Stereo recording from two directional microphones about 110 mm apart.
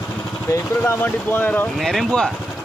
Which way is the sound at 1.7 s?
Centre (ahead or behind).